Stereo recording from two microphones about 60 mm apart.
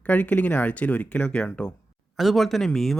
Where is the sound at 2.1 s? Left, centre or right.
Centre.